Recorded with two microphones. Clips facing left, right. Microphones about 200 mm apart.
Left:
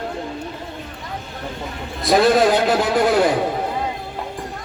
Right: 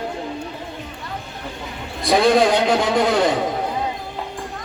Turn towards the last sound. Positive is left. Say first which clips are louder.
# left 1 dB
turn(degrees=5)  # may be behind; listen again after turning